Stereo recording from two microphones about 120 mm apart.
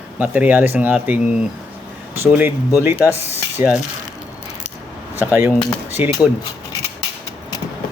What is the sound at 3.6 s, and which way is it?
Coin, 20° right (ahead or behind).